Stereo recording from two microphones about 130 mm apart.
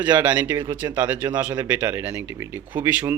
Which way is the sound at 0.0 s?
10° right (ahead or behind).